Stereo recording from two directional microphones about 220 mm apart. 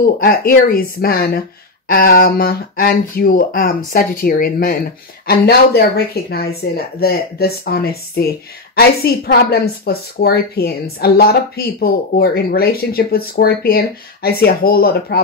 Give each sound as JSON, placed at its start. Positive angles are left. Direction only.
{"t": 0.0, "sound": "a woman's voice", "side_deg": 40}